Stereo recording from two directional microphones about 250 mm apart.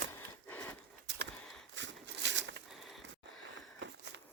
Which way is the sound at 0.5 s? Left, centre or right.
Centre.